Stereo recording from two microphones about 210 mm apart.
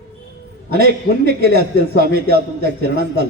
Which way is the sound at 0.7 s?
45° right (ahead or behind).